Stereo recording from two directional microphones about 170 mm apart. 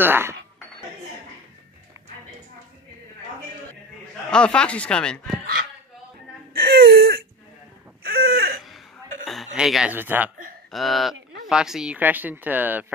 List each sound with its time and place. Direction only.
0.0 s speech: 15° right (ahead or behind)
4.3 s speech: 5° left (ahead or behind)
6.5 s whimper: 65° right (ahead or behind)
8.1 s a sound: 65° right (ahead or behind)
9.2 s speech: centre (ahead or behind)
10.7 s speech: centre (ahead or behind)